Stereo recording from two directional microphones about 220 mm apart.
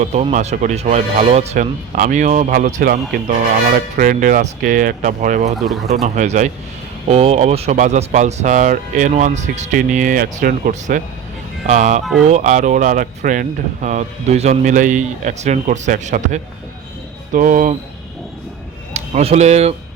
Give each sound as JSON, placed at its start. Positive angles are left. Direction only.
{"t": 0.0, "sound": "speech", "side_deg": -30}
{"t": 5.5, "sound": "speech", "side_deg": 0}
{"t": 5.9, "sound": "speech", "side_deg": -30}
{"t": 18.9, "sound": "speech", "side_deg": -30}